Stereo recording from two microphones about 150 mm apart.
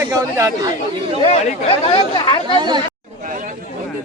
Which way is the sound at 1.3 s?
40° left (ahead or behind).